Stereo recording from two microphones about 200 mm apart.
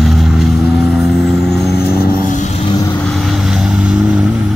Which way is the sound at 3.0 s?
Centre (ahead or behind).